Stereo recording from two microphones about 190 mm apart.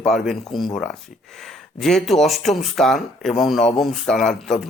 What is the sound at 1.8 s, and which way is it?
A man's voice, centre (ahead or behind).